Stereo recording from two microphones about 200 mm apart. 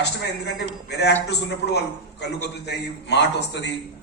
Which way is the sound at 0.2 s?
55° left (ahead or behind).